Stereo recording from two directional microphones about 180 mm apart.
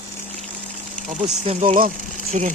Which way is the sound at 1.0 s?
40° right (ahead or behind).